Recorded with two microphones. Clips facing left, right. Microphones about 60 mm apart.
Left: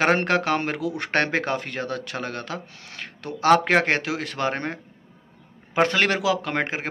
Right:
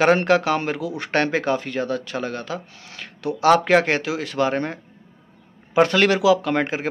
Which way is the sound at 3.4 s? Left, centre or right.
Left.